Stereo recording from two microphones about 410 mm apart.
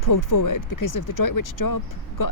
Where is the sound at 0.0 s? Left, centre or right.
Left.